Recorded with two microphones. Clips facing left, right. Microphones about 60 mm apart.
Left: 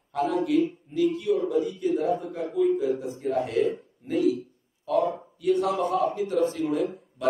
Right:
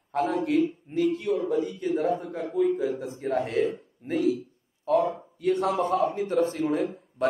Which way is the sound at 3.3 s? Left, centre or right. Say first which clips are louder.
Even; right.